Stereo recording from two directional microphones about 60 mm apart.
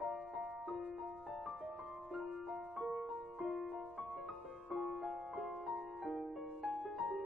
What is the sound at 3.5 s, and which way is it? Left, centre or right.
Music, right.